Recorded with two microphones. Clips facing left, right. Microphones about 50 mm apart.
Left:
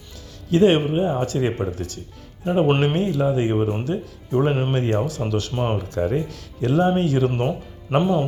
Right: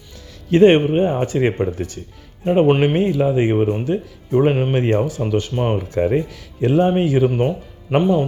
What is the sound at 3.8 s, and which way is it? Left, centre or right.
Speech, right.